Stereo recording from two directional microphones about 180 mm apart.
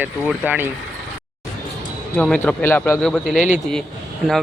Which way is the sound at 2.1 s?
10° left (ahead or behind).